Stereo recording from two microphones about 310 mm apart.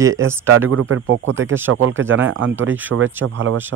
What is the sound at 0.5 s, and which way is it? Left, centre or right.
Speech, right.